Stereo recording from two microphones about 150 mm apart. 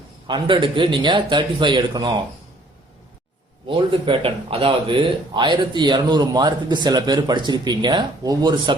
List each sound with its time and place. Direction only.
0.3 s a man's voice: 30° right (ahead or behind)
3.7 s speech: 35° right (ahead or behind)